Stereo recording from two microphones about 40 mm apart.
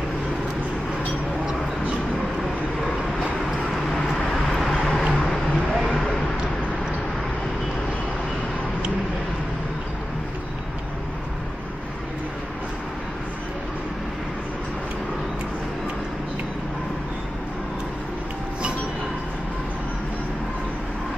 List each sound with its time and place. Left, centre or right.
4.3 s vehicle: centre
4.6 s vehicle: centre
5.0 s vehicle: centre
5.5 s vehicle: centre